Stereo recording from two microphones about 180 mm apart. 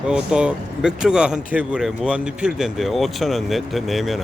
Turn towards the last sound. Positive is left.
turn(degrees=0)  # may be behind; listen again after turning